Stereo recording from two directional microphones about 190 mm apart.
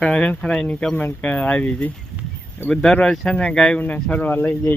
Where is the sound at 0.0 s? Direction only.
5° left (ahead or behind).